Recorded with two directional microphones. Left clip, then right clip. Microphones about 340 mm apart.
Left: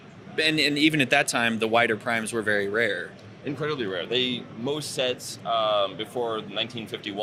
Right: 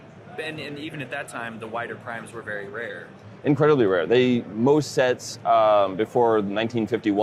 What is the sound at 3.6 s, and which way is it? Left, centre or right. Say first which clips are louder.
Speech: right 10 dB; right.